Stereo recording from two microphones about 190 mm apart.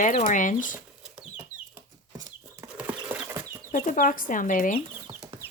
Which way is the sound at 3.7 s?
45° left (ahead or behind).